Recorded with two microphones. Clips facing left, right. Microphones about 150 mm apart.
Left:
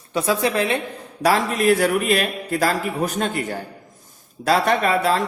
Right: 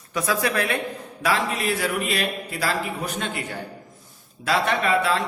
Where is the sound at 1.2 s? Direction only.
45° left (ahead or behind).